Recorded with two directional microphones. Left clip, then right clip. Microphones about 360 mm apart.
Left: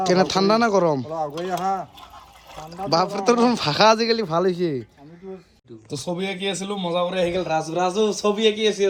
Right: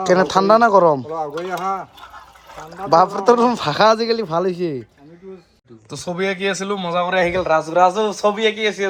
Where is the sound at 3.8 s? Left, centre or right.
Centre.